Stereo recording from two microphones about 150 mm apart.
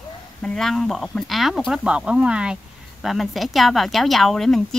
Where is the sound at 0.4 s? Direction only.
5° left (ahead or behind).